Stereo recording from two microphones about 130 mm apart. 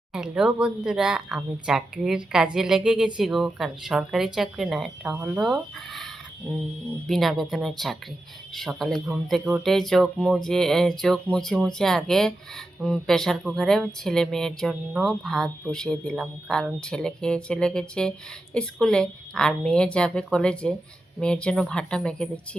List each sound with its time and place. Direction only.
0.1 s speech: 5° right (ahead or behind)
5.1 s speech: 15° right (ahead or behind)
5.4 s speech: centre (ahead or behind)
7.1 s a woman's voice: centre (ahead or behind)